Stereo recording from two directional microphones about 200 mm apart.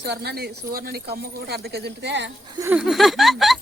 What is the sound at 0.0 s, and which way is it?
Speech, 55° right (ahead or behind).